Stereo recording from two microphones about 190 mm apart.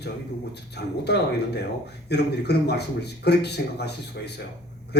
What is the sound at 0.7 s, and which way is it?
A man's voice, 60° left (ahead or behind).